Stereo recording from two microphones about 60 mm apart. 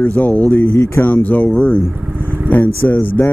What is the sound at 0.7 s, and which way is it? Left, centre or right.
Speech, left.